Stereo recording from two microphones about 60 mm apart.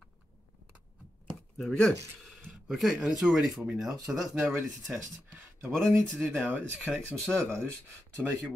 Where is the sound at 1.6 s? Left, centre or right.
Centre.